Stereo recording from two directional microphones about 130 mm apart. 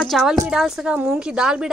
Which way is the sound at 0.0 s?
Centre (ahead or behind).